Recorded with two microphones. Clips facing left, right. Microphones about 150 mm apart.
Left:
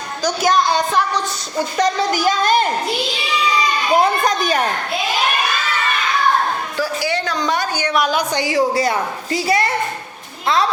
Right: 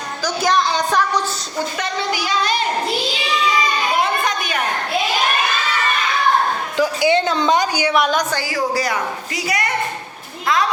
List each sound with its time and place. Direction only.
1.8 s a woman's voice: 40° left (ahead or behind)
3.9 s children playing: 40° left (ahead or behind)
6.7 s a woman's voice: 20° right (ahead or behind)
7.9 s a woman's voice: centre (ahead or behind)
8.3 s a woman's voice: 20° left (ahead or behind)